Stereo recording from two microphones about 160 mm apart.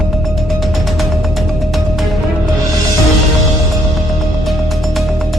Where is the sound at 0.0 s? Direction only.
Centre (ahead or behind).